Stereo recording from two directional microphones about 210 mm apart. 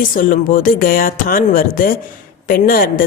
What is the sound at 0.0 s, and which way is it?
A woman's voice, 40° left (ahead or behind).